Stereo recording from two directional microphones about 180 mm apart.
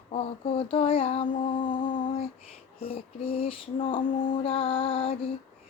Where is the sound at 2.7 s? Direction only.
30° left (ahead or behind).